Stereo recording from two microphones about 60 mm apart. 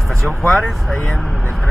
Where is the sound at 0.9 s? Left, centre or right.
Left.